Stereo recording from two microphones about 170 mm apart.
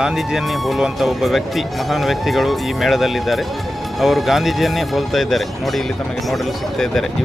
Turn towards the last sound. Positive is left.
turn(degrees=0)  # may be behind; listen again after turning